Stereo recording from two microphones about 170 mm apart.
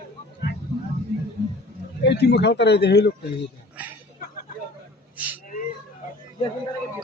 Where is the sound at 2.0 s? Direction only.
85° left.